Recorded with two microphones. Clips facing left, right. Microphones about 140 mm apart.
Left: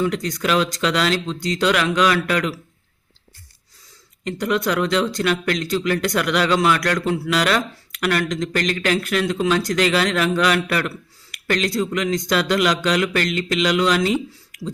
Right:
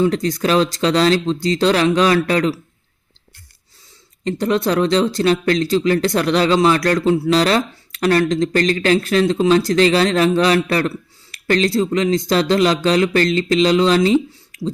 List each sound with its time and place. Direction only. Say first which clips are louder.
0.0 s speech: right 5 dB; 35° right (ahead or behind)
4.2 s speech: right 4 dB; 30° right (ahead or behind)